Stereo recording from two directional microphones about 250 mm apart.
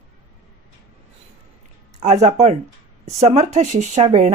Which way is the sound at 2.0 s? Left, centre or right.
Right.